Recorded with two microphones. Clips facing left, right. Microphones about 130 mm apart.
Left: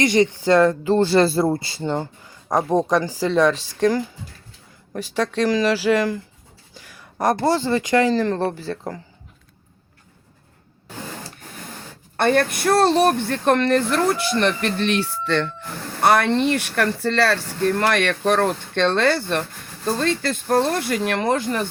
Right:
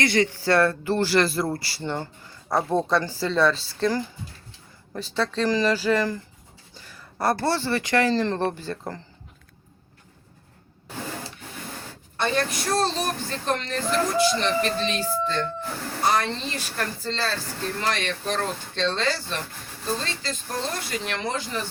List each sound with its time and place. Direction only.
0.0 s speech: 20° left (ahead or behind)
8.1 s speech: 5° left (ahead or behind)
12.1 s speech: 55° left (ahead or behind); by 15.4 s 75° left (ahead or behind)
16.0 s speech: 65° left (ahead or behind)